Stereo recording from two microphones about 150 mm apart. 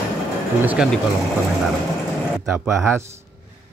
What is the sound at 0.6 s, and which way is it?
Speech, 10° right (ahead or behind).